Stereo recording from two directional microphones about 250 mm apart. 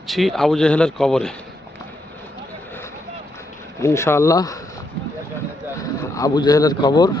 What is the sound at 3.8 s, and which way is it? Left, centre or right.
Speech, centre.